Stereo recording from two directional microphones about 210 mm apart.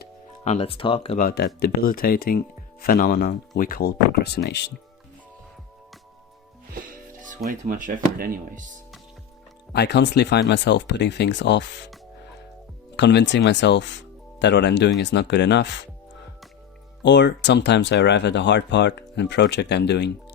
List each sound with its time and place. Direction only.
0.4 s speech: 30° left (ahead or behind)
1.2 s speech: 45° left (ahead or behind)
6.7 s speech: 40° right (ahead or behind)
9.7 s speech: 55° left (ahead or behind)
13.0 s speech: 55° left (ahead or behind)
17.0 s speech: 55° left (ahead or behind)